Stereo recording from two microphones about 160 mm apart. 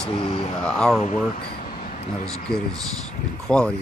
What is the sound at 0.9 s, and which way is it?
Speech, 45° left (ahead or behind).